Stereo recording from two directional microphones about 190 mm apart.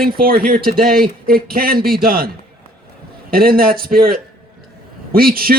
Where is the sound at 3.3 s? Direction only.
50° right (ahead or behind).